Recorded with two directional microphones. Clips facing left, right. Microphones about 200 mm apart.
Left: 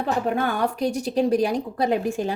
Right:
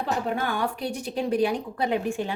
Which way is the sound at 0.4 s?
40° left (ahead or behind).